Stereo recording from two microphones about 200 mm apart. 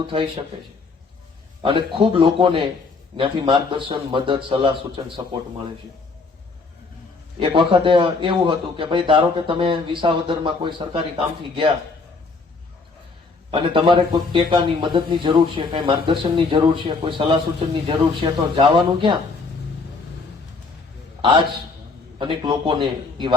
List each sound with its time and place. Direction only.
0.0 s speech: 25° right (ahead or behind)
1.6 s speech: 25° right (ahead or behind)
7.3 s speech: 25° right (ahead or behind)
13.5 s speech: 25° right (ahead or behind)
21.2 s a man's voice: 25° right (ahead or behind)